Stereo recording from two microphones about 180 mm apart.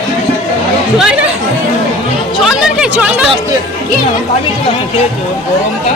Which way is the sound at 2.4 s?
5° right (ahead or behind).